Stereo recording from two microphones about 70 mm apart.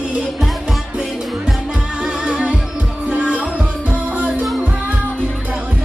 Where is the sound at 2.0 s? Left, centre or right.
Centre.